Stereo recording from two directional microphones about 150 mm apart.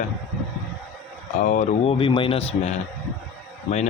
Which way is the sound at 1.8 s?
35° left (ahead or behind).